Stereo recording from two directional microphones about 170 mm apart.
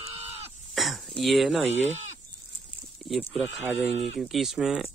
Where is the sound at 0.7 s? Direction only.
Centre (ahead or behind).